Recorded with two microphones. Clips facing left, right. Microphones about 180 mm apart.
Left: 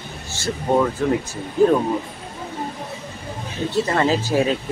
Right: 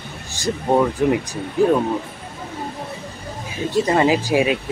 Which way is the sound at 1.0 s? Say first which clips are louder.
Right 2 dB; 15° right (ahead or behind).